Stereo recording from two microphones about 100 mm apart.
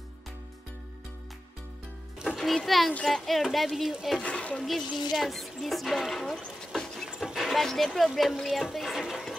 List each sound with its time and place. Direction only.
2.2 s a child's voice: centre (ahead or behind)
4.2 s speech: 10° left (ahead or behind)
5.1 s speech: centre (ahead or behind)